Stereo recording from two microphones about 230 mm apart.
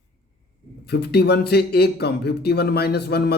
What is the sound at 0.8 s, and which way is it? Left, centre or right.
Speech, left.